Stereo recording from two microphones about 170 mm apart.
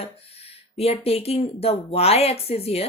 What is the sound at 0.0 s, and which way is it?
A woman's voice, 35° left (ahead or behind).